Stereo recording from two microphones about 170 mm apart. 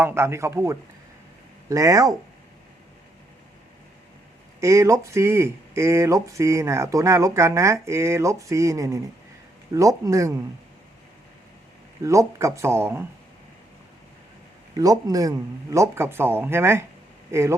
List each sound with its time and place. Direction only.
0.0 s speech: 15° right (ahead or behind)
4.6 s speech: 15° right (ahead or behind)
12.0 s speech: 20° right (ahead or behind)
14.8 s speech: 20° right (ahead or behind)